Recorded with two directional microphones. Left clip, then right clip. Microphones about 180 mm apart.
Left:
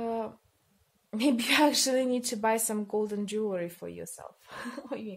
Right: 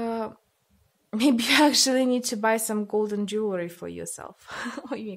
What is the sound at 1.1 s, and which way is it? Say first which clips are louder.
A woman's voice: right 5 dB; 40° right (ahead or behind).